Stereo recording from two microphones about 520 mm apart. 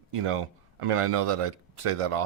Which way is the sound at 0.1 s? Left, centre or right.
Right.